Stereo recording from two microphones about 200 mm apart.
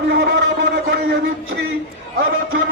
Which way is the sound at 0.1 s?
55° right (ahead or behind).